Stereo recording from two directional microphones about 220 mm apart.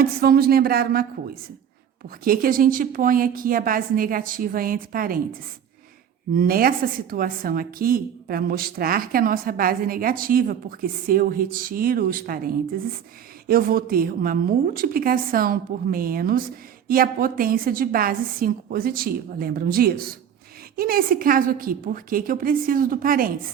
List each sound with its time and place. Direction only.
0.0 s speech: 45° right (ahead or behind)
2.2 s a woman's voice: 40° right (ahead or behind)
6.3 s a woman's voice: 40° right (ahead or behind)